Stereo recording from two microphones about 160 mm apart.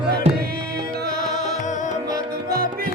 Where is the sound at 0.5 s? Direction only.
85° right.